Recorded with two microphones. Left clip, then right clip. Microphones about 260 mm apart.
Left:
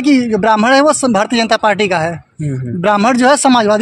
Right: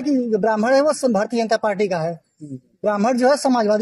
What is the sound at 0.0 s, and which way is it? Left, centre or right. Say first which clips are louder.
Speech: left 7 dB; left.